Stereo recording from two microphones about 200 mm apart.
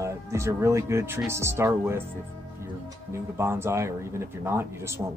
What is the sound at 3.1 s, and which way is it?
Speech, 15° right (ahead or behind).